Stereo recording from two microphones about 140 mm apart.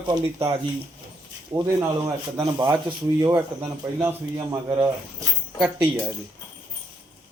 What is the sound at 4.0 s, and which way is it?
Speech, 15° right (ahead or behind).